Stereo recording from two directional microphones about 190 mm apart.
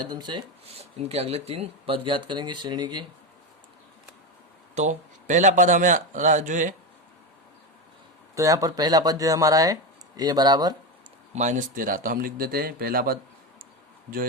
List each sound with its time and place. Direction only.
0.0 s speech: 20° right (ahead or behind)
4.7 s a man's voice: 40° right (ahead or behind)
8.4 s speech: 15° right (ahead or behind)
11.3 s speech: 40° right (ahead or behind)